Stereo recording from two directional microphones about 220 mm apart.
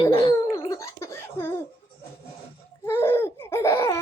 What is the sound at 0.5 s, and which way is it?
Laughter, 15° left (ahead or behind).